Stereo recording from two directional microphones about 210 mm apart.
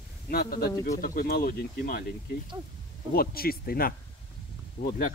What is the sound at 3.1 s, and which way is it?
Speech, 45° left (ahead or behind).